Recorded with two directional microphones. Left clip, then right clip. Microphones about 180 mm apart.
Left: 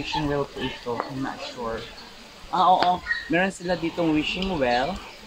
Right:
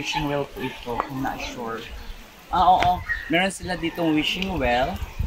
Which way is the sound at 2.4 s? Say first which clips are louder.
Right 1 dB; 25° right (ahead or behind).